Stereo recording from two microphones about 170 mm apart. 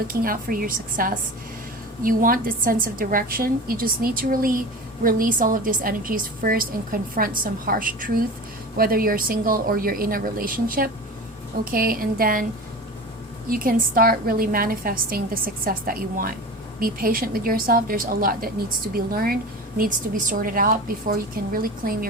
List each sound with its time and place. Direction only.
0.1 s a woman's voice: 55° right (ahead or behind)
13.5 s a woman's voice: 55° right (ahead or behind)